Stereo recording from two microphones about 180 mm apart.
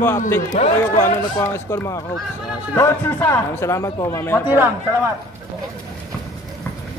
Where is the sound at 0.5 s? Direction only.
45° left (ahead or behind).